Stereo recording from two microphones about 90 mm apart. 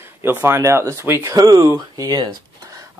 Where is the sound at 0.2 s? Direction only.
25° right (ahead or behind).